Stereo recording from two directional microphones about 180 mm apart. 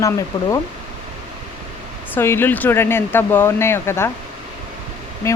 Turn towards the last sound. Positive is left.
turn(degrees=15)  # may be behind; listen again after turning